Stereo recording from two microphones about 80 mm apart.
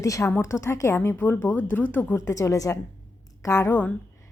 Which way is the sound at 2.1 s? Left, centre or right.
Left.